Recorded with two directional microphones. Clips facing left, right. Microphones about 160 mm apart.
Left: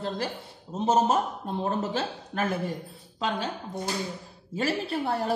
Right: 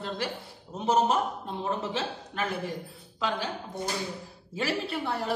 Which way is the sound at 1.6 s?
45° left (ahead or behind).